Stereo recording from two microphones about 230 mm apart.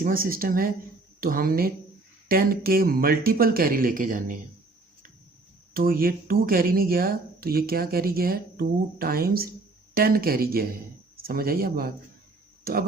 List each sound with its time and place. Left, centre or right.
0.0 s speech: right
5.7 s speech: right